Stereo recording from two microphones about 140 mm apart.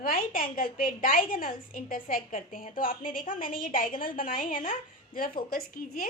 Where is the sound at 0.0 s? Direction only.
90° left.